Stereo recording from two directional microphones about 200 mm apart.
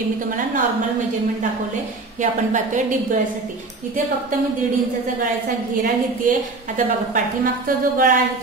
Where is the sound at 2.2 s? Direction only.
40° right (ahead or behind).